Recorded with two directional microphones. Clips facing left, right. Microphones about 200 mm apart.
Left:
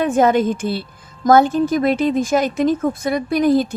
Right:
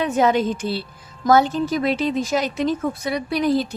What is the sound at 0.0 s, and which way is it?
A woman's voice, 50° left (ahead or behind).